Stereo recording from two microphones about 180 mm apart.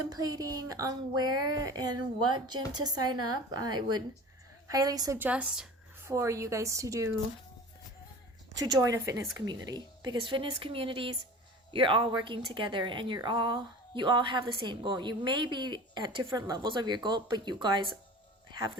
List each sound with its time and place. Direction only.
0.1 s a woman's voice: 20° right (ahead or behind)
6.1 s a woman's voice: 15° right (ahead or behind)
8.5 s a woman's voice: 20° right (ahead or behind)